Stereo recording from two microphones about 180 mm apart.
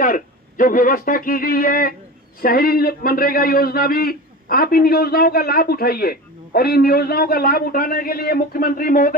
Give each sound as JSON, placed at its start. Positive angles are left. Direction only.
{"t": 0.0, "sound": "a man's voice", "side_deg": 50}